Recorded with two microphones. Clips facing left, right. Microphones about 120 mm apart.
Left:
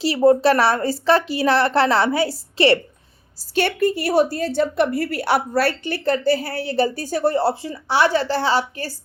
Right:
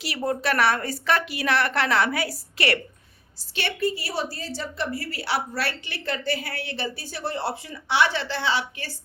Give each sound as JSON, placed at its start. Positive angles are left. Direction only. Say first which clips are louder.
{"t": 0.0, "sound": "a woman's voice", "louder": "left 12 dB", "side_deg": 30}
{"t": 3.5, "sound": "a woman's voice", "louder": "left 7 dB", "side_deg": 45}